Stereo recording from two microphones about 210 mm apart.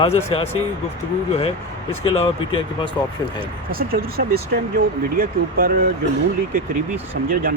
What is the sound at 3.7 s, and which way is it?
Speech, 45° right (ahead or behind).